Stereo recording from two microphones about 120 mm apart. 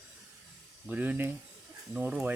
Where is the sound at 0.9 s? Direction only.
15° right (ahead or behind).